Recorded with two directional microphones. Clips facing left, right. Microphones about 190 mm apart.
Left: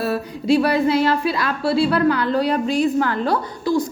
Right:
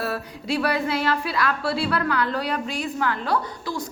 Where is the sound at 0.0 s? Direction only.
20° left (ahead or behind).